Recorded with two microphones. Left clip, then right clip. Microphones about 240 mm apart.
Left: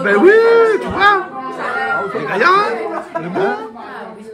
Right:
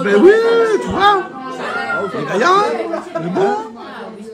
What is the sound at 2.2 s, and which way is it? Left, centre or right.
A man's voice, centre.